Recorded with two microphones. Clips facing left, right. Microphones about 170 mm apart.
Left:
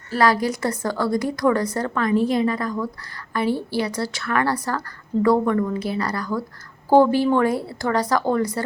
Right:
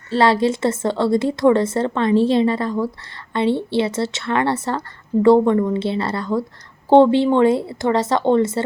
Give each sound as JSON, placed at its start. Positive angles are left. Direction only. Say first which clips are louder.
{"t": 0.1, "sound": "a woman's voice", "louder": "right 3 dB", "side_deg": -25}